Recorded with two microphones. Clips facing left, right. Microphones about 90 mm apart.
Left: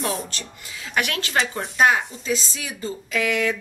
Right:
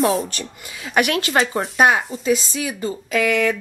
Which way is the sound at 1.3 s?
40° right (ahead or behind).